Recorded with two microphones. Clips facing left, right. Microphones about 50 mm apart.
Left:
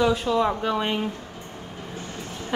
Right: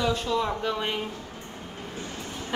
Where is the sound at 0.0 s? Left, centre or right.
Centre.